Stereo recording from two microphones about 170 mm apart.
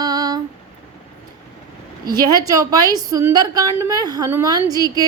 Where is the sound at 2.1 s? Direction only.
20° right (ahead or behind).